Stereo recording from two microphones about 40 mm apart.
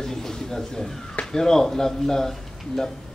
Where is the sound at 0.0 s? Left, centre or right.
Centre.